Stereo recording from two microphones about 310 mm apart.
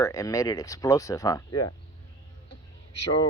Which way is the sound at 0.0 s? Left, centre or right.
Centre.